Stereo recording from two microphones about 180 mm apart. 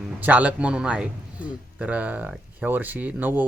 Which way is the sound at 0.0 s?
10° right (ahead or behind).